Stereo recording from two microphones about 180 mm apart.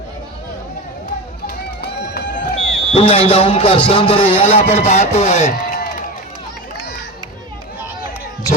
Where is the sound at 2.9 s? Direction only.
30° left (ahead or behind).